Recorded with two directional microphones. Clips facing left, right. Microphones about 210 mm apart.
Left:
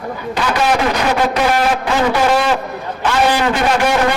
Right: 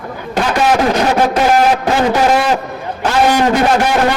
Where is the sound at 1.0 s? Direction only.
45° right (ahead or behind).